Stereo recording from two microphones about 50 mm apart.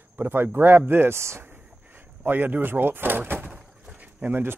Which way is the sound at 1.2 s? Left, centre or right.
Right.